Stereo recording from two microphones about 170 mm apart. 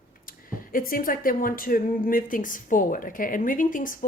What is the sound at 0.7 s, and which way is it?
A woman's voice, 55° left (ahead or behind).